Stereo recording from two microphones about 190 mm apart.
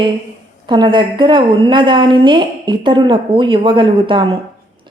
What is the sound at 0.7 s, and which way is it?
A woman's voice, 25° right (ahead or behind).